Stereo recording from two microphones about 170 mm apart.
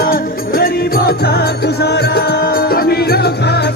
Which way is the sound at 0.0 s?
60° left (ahead or behind).